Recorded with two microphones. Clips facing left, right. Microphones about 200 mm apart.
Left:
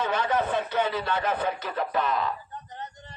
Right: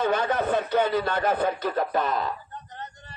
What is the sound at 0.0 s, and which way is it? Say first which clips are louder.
Speech: right 2 dB; 45° right (ahead or behind).